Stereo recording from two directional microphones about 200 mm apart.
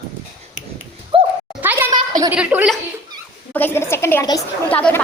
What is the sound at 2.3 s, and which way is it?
Speech, 5° right (ahead or behind).